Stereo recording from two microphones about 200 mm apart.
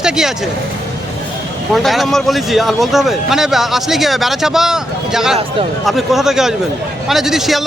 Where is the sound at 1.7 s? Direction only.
Centre (ahead or behind).